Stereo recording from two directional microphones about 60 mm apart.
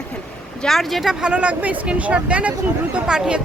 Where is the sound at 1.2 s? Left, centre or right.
Centre.